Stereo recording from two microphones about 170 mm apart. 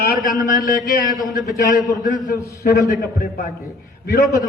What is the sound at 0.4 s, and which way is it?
Speech, 50° left (ahead or behind).